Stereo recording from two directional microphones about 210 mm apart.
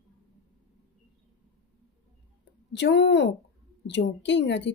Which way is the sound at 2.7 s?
55° left (ahead or behind).